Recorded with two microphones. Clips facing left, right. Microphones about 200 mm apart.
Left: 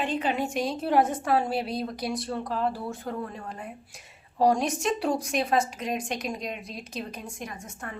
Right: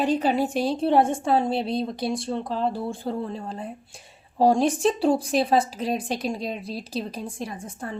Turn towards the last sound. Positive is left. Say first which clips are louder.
# right 5 dB
turn(degrees=-30)  # may be behind; listen again after turning